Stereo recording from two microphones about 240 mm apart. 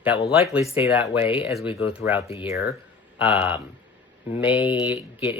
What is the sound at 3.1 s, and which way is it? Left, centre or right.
Speech, centre.